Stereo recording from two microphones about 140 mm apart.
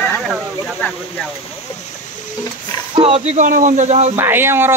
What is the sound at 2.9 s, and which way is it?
Speech, 45° right (ahead or behind).